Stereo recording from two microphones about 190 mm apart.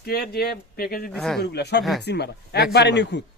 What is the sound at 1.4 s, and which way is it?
Speech, 60° left (ahead or behind).